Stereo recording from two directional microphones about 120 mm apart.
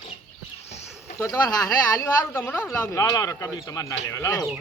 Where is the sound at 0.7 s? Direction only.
65° left (ahead or behind).